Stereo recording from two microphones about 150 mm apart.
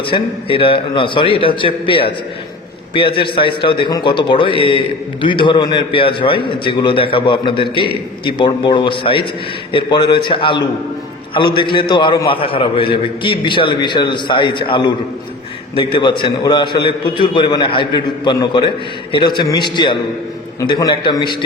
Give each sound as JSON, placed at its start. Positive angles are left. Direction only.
{"t": 0.0, "sound": "a man's voice", "side_deg": 35}
{"t": 3.2, "sound": "a man's voice", "side_deg": 35}